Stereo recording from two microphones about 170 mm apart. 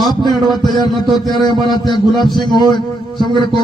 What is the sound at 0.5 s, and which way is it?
A man's voice, 25° left (ahead or behind).